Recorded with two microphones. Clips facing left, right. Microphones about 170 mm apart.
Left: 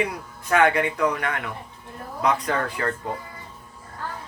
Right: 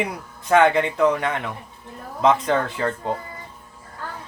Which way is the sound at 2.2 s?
25° right (ahead or behind).